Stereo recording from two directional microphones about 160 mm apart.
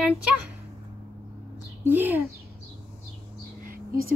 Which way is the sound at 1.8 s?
10° right (ahead or behind).